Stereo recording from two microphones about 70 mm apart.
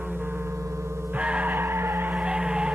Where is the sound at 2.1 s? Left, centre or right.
Centre.